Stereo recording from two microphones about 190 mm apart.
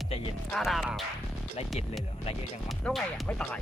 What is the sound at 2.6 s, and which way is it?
Speech, centre (ahead or behind).